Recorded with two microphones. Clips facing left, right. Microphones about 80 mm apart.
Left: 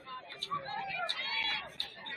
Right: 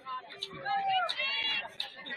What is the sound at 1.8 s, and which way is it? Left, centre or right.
Chicken, right.